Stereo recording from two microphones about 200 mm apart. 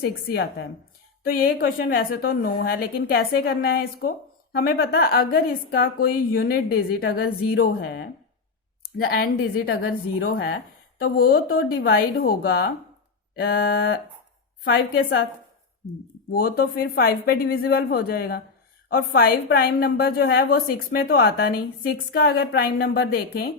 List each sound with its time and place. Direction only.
0.0 s a woman's voice: 55° left (ahead or behind)
8.8 s speech: 50° left (ahead or behind)
9.3 s a woman's voice: 90° left
10.9 s a woman's voice: 50° left (ahead or behind); by 15.3 s 65° left (ahead or behind)
16.3 s a woman's voice: 50° left (ahead or behind)